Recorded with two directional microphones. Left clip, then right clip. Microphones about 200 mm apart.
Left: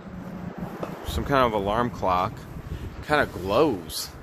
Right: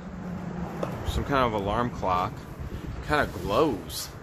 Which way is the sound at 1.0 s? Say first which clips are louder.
Left 4 dB; 55° left (ahead or behind).